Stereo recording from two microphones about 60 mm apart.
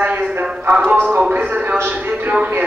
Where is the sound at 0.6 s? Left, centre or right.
Right.